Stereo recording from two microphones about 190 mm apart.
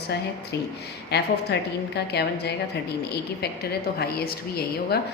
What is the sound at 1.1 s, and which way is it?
A woman's voice, 60° left (ahead or behind).